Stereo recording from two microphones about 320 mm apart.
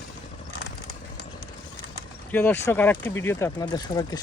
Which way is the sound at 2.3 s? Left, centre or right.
Centre.